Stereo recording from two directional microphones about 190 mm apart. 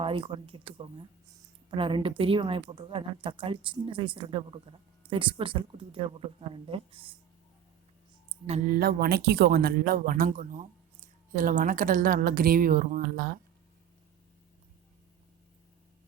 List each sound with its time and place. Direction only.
0.0 s a woman's voice: 30° right (ahead or behind)
8.4 s speech: 35° right (ahead or behind)
8.7 s speech: 55° right (ahead or behind)